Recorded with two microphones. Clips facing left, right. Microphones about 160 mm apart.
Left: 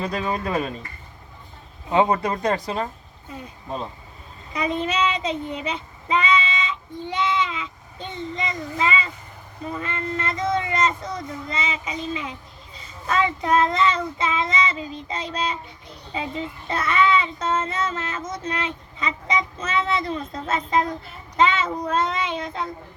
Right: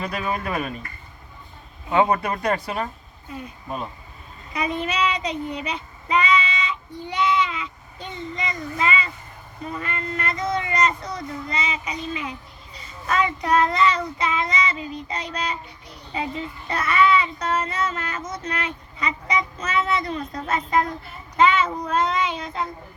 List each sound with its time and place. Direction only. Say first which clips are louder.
0.0 s child singing: left 1 dB; 30° left (ahead or behind)
1.9 s child singing: even; 25° left (ahead or behind)